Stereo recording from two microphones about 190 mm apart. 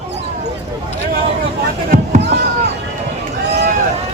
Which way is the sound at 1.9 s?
35° right (ahead or behind).